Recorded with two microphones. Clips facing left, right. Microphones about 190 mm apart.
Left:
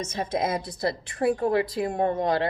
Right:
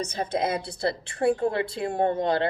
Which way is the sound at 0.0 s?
30° right (ahead or behind).